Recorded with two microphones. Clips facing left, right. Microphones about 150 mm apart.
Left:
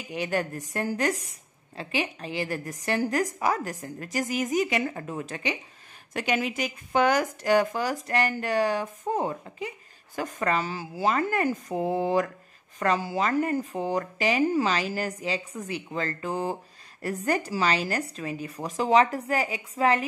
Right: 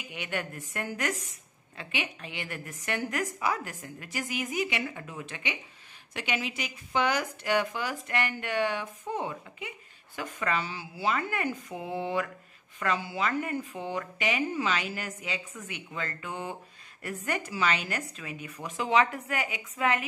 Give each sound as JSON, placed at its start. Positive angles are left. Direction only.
{"t": 0.1, "sound": "speech", "side_deg": 35}